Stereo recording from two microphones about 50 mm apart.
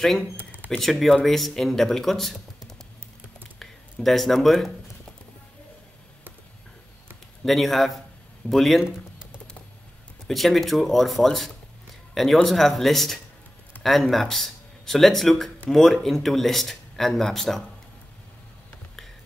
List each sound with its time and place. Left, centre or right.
0.4 s a sound: right
0.7 s speech: centre
7.4 s speech: centre
8.8 s typing: centre
10.2 s speech: centre